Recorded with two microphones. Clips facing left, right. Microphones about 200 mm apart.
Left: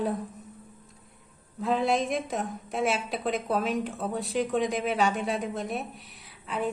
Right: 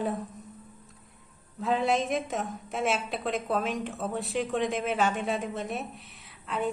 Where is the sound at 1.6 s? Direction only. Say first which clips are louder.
Left 1 dB; centre (ahead or behind).